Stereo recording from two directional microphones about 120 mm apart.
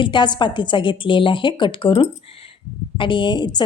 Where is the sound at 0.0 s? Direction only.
40° left (ahead or behind).